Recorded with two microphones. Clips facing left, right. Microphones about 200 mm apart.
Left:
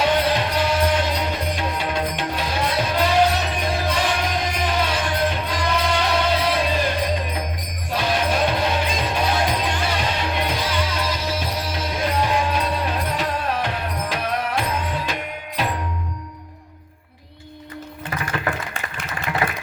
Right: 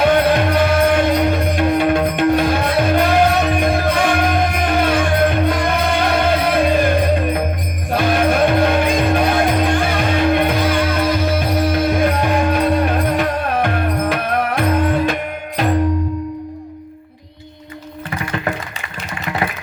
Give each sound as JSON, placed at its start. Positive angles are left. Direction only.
{"t": 0.0, "sound": "music", "side_deg": -55}